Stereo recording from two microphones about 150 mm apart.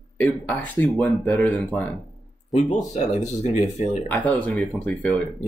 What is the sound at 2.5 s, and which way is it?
Speech, 50° left (ahead or behind).